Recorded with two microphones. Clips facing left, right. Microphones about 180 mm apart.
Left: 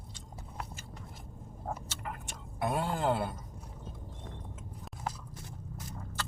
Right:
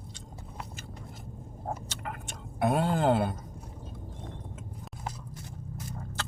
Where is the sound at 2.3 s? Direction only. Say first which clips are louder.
Right 6 dB; 20° right (ahead or behind).